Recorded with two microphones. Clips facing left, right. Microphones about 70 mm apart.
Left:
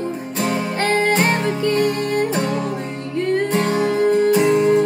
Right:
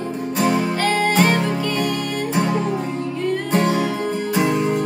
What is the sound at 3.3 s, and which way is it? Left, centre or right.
Music, left.